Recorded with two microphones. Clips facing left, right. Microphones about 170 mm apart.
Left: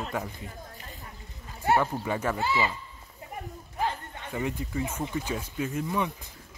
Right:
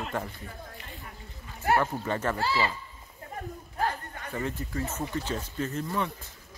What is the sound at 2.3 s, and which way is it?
Speech, 20° left (ahead or behind).